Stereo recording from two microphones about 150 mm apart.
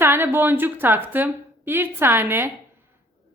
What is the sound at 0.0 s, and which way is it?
Speech, 15° right (ahead or behind).